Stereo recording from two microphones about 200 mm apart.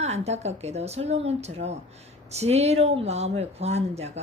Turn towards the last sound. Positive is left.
turn(degrees=-30)  # may be behind; listen again after turning